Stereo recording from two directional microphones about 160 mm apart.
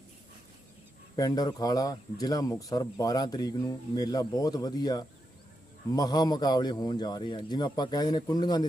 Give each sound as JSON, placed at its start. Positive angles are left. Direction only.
{"t": 1.1, "sound": "speech", "side_deg": 25}